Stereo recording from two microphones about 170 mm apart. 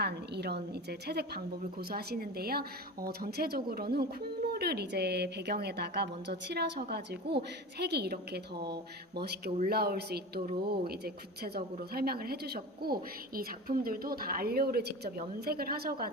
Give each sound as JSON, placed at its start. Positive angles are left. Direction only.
{"t": 0.0, "sound": "a woman's voice", "side_deg": -75}